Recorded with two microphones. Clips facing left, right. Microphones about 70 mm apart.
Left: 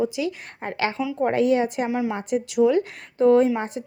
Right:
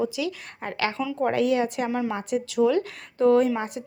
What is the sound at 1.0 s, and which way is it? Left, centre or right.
Speech, centre.